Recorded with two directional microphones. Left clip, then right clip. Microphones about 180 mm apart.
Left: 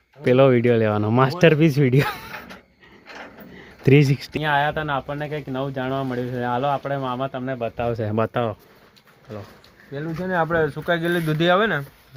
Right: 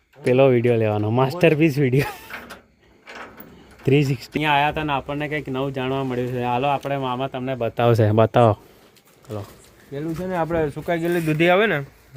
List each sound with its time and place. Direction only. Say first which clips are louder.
0.3 s speech: even; 5° left (ahead or behind)
3.8 s speech: left 2 dB; 10° left (ahead or behind)
4.4 s speech: right 2 dB; 5° right (ahead or behind)
7.6 s speech: right 7 dB; 90° right
7.9 s speech: right 7 dB; 25° right (ahead or behind)
9.9 s speech: left 1 dB; 5° right (ahead or behind)